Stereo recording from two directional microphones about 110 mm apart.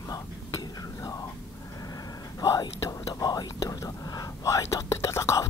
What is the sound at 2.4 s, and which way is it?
Whispering, 35° left (ahead or behind).